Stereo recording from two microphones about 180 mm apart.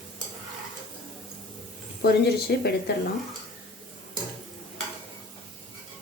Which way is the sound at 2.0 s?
65° left (ahead or behind).